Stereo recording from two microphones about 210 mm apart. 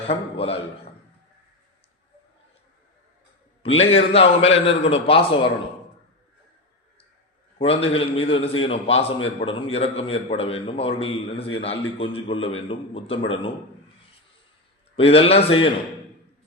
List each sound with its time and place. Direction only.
0.1 s a man's voice: 25° left (ahead or behind)
3.6 s a man's voice: 30° left (ahead or behind)
7.6 s a man's voice: 25° left (ahead or behind)
14.9 s a man's voice: 25° left (ahead or behind)